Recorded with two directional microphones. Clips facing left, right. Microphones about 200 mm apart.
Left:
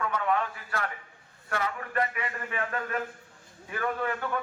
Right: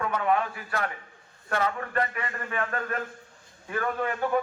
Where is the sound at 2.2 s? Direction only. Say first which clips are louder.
Right 2 dB; 45° right (ahead or behind).